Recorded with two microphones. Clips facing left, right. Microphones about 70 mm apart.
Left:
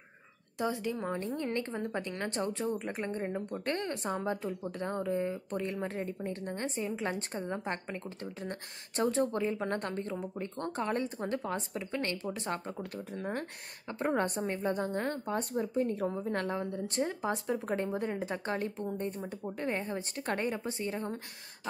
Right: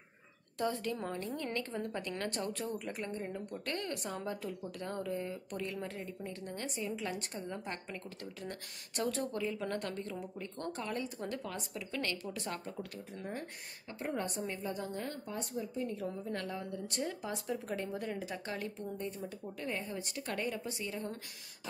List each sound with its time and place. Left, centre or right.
0.6 s a woman's voice: centre
1.1 s a woman's voice: left
13.2 s a woman's voice: left